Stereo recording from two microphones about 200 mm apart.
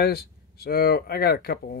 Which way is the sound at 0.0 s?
50° left (ahead or behind).